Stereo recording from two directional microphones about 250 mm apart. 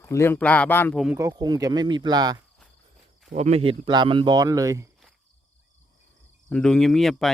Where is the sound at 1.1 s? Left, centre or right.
Centre.